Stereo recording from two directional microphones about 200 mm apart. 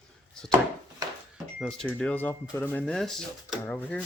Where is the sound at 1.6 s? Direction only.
5° left (ahead or behind).